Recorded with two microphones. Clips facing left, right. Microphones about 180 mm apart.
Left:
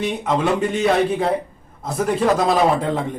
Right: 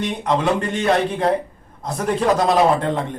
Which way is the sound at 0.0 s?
5° left (ahead or behind).